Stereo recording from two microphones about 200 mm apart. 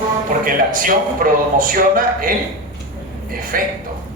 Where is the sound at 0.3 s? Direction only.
45° right (ahead or behind).